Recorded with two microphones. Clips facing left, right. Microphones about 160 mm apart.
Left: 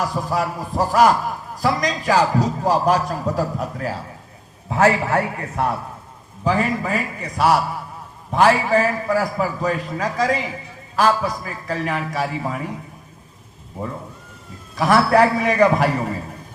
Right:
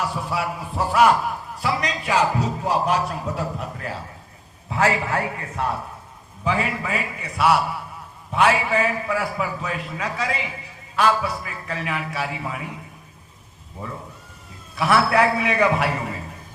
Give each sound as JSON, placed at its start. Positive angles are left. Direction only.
{"t": 0.0, "sound": "a man's voice", "side_deg": 40}
{"t": 13.8, "sound": "a man's voice", "side_deg": 45}